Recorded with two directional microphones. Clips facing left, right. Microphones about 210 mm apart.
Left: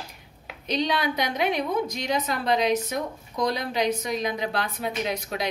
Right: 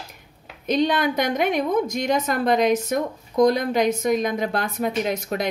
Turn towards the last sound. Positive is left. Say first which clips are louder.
# right 5 dB
turn(degrees=-50)  # may be behind; listen again after turning